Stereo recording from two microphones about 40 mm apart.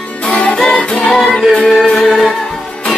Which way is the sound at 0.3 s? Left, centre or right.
Left.